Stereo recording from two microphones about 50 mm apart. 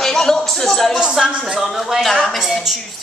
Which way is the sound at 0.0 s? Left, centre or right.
Centre.